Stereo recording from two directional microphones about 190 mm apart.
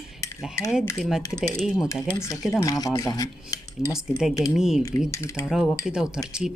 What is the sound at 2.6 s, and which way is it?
Speech, 20° left (ahead or behind).